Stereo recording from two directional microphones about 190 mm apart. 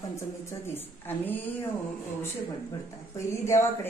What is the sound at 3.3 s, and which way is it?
Speech, 15° left (ahead or behind).